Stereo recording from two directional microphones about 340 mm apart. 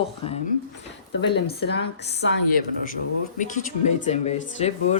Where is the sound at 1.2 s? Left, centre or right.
Left.